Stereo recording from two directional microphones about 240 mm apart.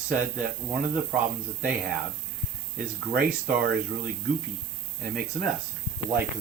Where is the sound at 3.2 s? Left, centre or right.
Centre.